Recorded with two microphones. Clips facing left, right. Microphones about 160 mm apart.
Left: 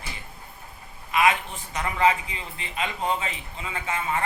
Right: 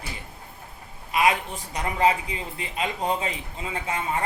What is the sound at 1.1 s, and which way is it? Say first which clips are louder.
A woman's voice: even; 35° right (ahead or behind).